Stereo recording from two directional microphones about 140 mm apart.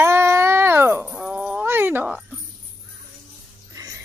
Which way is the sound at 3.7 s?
25° right (ahead or behind).